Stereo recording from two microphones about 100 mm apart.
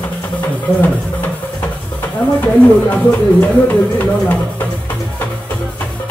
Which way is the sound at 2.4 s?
15° left (ahead or behind).